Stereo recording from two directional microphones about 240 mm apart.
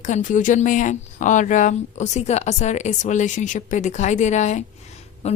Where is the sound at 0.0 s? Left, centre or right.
Left.